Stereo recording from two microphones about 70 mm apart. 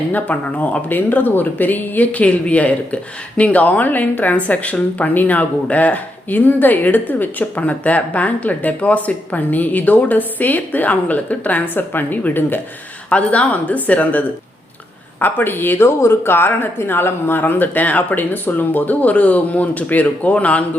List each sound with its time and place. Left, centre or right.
0.1 s speech: left
13.1 s speech: centre